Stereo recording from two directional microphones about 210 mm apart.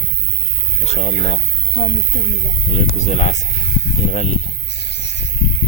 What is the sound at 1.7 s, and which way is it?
Speech, 55° left (ahead or behind).